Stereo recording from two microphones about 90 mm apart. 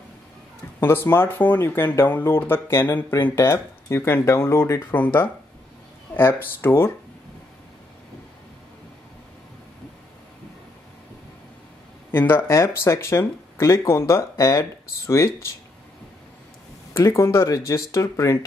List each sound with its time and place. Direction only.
0.7 s speech: 25° left (ahead or behind)
12.1 s speech: 25° left (ahead or behind)
16.9 s speech: 30° left (ahead or behind)